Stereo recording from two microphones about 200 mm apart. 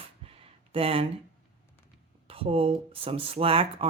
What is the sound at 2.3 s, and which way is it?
Speech, 30° right (ahead or behind).